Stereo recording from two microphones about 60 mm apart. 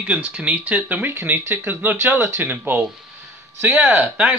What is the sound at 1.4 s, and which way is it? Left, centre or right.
Speech, right.